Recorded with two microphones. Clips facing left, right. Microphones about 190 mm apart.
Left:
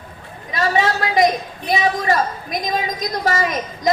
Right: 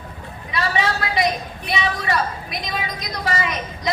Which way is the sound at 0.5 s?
45° left (ahead or behind).